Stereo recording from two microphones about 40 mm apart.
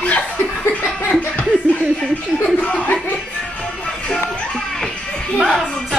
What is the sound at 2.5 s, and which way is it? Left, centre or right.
Chuckle, left.